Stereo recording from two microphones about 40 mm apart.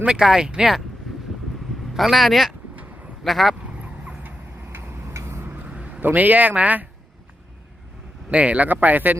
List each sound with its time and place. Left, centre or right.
0.2 s speech: centre
0.4 s speech: right
1.9 s speech: centre
5.6 s a sound: right
6.1 s speech: right
8.3 s speech: right
8.7 s speech: right